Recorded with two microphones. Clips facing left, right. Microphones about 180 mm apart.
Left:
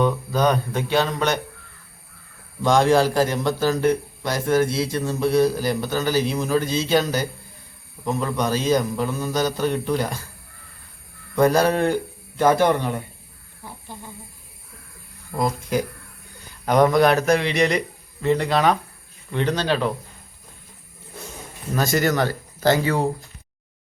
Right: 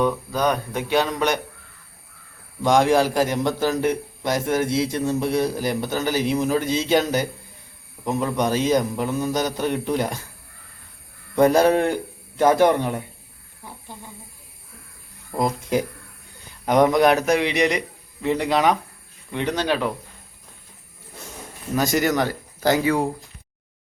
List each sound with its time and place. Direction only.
0.0 s a man's voice: 10° right (ahead or behind)
2.6 s a man's voice: 15° right (ahead or behind)
11.3 s a man's voice: 20° right (ahead or behind)
15.4 s a man's voice: 20° right (ahead or behind)
21.8 s a man's voice: 15° right (ahead or behind)